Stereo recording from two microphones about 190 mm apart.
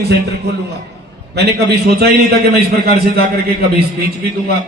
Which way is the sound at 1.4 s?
60° right (ahead or behind).